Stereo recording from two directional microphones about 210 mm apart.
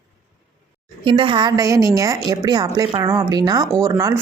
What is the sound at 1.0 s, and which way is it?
A woman's voice, 25° right (ahead or behind).